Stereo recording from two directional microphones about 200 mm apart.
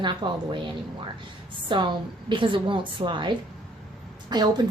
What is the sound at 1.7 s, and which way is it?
A woman's voice, 25° right (ahead or behind).